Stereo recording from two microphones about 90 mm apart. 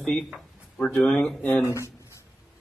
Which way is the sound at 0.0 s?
5° left (ahead or behind).